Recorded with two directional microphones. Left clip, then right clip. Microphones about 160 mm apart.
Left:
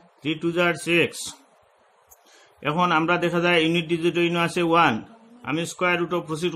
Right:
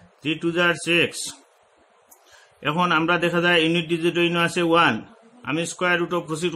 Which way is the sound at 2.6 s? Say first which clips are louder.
Even; 20° left (ahead or behind).